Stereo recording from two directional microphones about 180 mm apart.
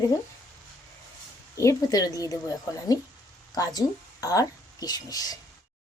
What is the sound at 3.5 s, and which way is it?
Speech, 20° left (ahead or behind).